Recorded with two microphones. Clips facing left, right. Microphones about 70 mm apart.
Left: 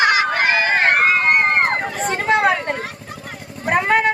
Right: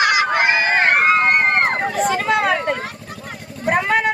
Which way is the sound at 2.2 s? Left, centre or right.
Left.